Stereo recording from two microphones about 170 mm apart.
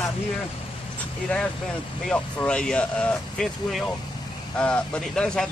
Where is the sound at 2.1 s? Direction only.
5° left (ahead or behind).